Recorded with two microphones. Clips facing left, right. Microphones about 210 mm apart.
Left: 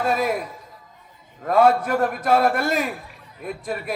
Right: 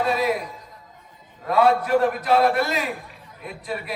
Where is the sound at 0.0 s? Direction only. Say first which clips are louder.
Even; 50° left (ahead or behind).